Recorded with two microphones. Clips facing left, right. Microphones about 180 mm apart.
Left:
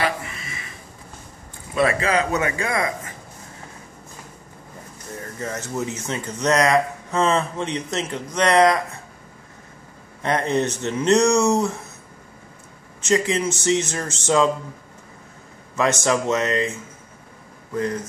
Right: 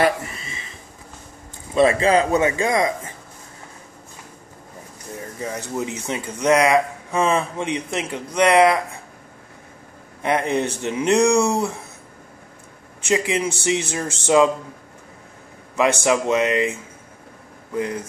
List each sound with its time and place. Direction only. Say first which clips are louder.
0.0 s a sound: right 5 dB; 35° right (ahead or behind)
1.7 s speech: right 4 dB; 25° right (ahead or behind)
5.2 s speech: right 1 dB; 15° right (ahead or behind)
10.2 s speech: even; 10° right (ahead or behind)
13.0 s speech: even; 15° right (ahead or behind)
15.7 s speech: right 2 dB; 15° right (ahead or behind)
17.7 s speech: even; 10° right (ahead or behind)